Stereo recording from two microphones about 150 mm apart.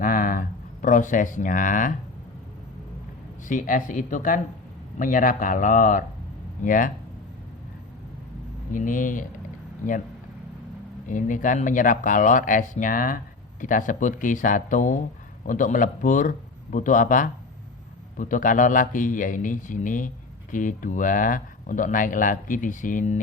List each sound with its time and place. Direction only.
0.0 s a sound: 65° left (ahead or behind)
3.5 s speech: 60° left (ahead or behind)
8.7 s speech: 60° left (ahead or behind)
11.1 s speech: 60° left (ahead or behind)